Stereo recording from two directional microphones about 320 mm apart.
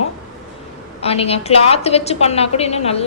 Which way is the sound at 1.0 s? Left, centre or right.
Centre.